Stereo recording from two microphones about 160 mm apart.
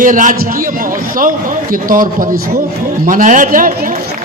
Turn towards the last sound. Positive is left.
turn(degrees=-55)  # may be behind; listen again after turning